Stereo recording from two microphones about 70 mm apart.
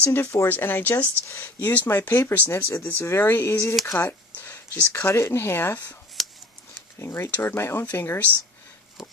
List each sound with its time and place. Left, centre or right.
0.1 s speech: left
0.5 s speech: left
2.9 s speech: left
3.8 s speech: left
4.4 s a sound: left
4.9 s speech: left
6.2 s a sound: centre
7.0 s speech: left
7.2 s speech: left
7.5 s speech: left